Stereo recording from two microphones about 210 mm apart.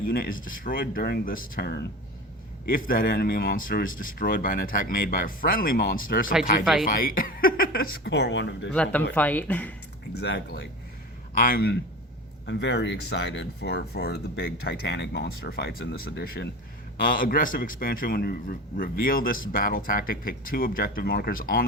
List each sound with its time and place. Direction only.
0.1 s speech: 45° left (ahead or behind); by 8.7 s 60° left (ahead or behind)
8.7 s speech: 5° left (ahead or behind)
10.2 s speech: 55° left (ahead or behind)